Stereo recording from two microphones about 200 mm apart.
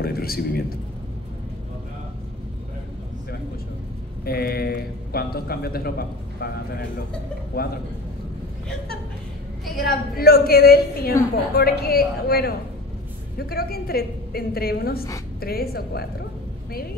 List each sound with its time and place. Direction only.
0.0 s a man's voice: 50° left (ahead or behind)
4.2 s a man's voice: 50° left (ahead or behind)
9.8 s a man's voice: 50° left (ahead or behind)